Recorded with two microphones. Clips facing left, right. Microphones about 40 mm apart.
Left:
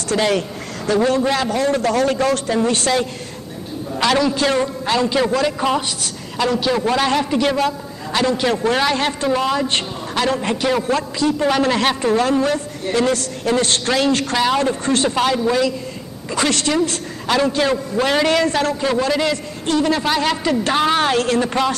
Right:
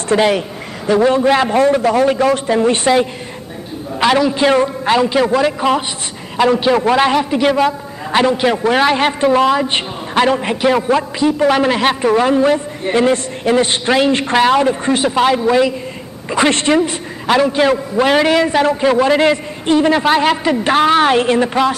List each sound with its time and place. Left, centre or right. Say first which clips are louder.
0.1 s a man's voice: right 5 dB; right
1.7 s a man's voice: right 4 dB; centre